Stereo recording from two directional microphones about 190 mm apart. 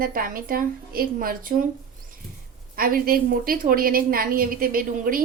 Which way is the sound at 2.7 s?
50° right (ahead or behind).